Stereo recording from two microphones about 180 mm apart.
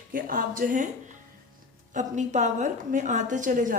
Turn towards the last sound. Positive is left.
turn(degrees=-45)  # may be behind; listen again after turning